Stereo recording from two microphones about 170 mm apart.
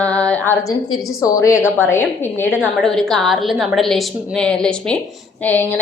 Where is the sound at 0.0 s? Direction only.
5° left (ahead or behind).